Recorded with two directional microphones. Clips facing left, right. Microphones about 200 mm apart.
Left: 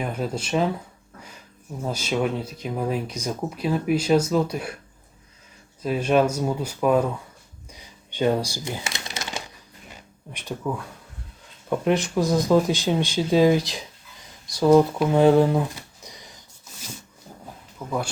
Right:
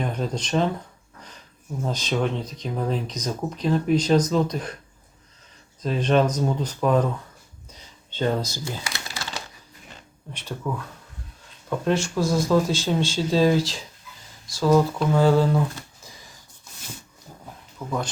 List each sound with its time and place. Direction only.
0.0 s speech: 5° left (ahead or behind)
1.8 s speech: 10° left (ahead or behind)
5.8 s speech: 10° left (ahead or behind)
7.7 s shuffling cards: 15° left (ahead or behind)
9.9 s a sound: 10° left (ahead or behind)
11.7 s speech: 15° left (ahead or behind)
16.0 s a sound: 20° left (ahead or behind)
17.7 s speech: 5° left (ahead or behind)